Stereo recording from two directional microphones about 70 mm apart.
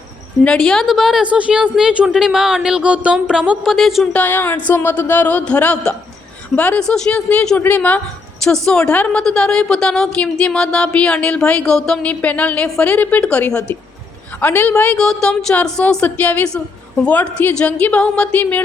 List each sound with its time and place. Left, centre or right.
0.4 s a woman's voice: centre
1.2 s speech: centre
3.7 s a woman's voice: centre
4.0 s a woman's voice: left
7.6 s a woman's voice: left
8.4 s a woman's voice: centre
12.2 s a woman's voice: left
14.9 s a woman's voice: centre
16.0 s a woman's voice: left